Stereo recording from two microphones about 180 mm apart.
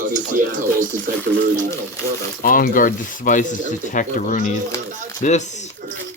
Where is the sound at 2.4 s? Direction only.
50° left (ahead or behind).